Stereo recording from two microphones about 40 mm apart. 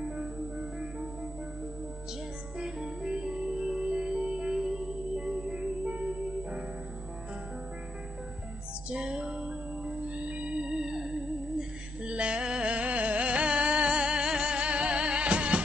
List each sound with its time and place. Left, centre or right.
2.6 s music: centre
3.6 s music: centre
3.9 s music: centre
4.7 s music: centre
8.9 s music: right
9.2 s music: centre
10.0 s music: right
10.9 s music: centre